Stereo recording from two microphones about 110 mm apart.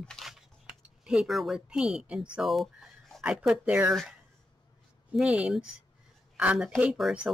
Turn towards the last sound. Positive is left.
turn(degrees=-5)  # may be behind; listen again after turning